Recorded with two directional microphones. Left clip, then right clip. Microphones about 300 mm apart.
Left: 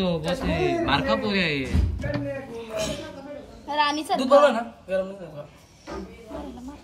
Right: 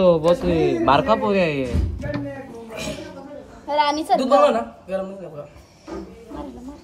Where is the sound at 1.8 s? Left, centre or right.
Centre.